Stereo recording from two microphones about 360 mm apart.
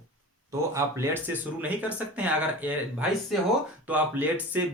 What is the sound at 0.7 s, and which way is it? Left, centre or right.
Speech, centre.